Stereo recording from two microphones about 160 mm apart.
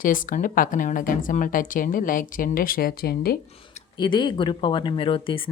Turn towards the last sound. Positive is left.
turn(degrees=35)  # may be behind; listen again after turning